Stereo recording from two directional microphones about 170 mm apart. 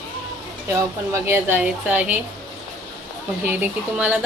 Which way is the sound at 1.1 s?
15° right (ahead or behind).